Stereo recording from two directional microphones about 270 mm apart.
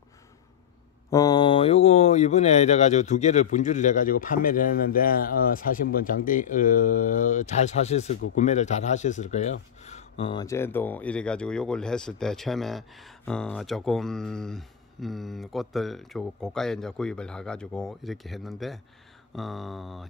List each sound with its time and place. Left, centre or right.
1.1 s speech: centre